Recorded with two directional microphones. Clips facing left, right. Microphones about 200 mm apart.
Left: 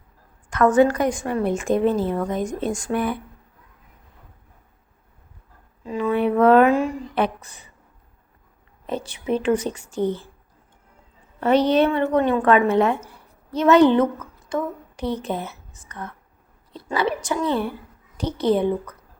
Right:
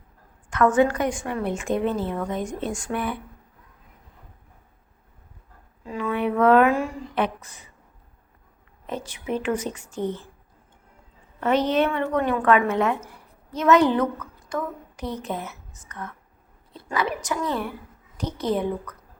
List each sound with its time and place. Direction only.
0.5 s a woman's voice: 40° left (ahead or behind)
5.8 s a woman's voice: 25° left (ahead or behind)
8.9 s a woman's voice: 30° left (ahead or behind)
11.3 s a woman's voice: 35° left (ahead or behind)